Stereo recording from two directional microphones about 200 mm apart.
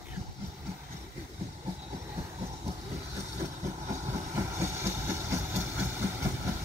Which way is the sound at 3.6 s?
35° right (ahead or behind).